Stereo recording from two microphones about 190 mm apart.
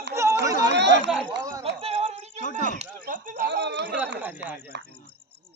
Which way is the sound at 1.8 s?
30° right (ahead or behind).